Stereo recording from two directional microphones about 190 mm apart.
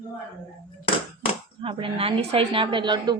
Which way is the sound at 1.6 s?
30° right (ahead or behind).